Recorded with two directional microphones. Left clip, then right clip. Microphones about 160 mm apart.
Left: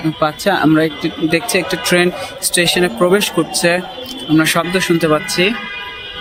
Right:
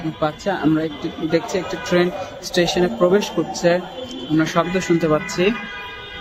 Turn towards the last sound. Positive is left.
turn(degrees=5)  # may be behind; listen again after turning